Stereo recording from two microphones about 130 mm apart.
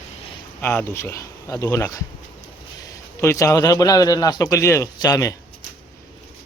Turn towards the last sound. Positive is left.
turn(degrees=25)  # may be behind; listen again after turning